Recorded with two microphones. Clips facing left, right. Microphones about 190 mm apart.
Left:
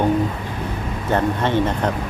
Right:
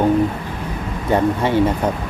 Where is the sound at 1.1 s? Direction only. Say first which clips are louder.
Right 3 dB; 10° right (ahead or behind).